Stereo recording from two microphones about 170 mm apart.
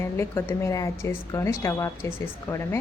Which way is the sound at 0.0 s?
15° left (ahead or behind).